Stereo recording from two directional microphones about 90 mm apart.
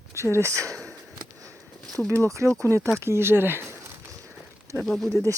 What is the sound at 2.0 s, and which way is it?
Speech, 20° left (ahead or behind).